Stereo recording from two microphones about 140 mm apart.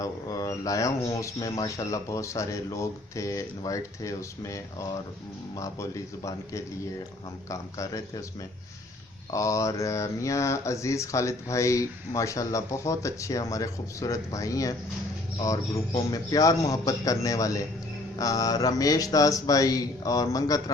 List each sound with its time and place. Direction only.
0.0 s speech: 25° left (ahead or behind)
16.0 s speech: 25° left (ahead or behind)